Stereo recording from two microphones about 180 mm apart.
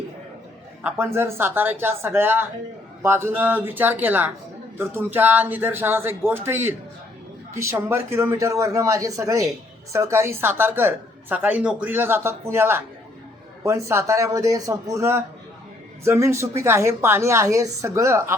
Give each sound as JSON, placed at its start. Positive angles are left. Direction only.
{"t": 0.9, "sound": "speech", "side_deg": -10}